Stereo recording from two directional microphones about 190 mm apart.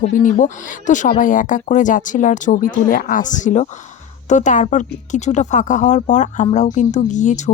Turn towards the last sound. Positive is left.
turn(degrees=40)  # may be behind; listen again after turning